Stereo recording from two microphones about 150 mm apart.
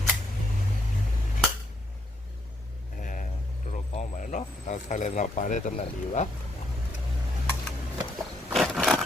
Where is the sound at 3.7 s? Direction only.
55° left (ahead or behind).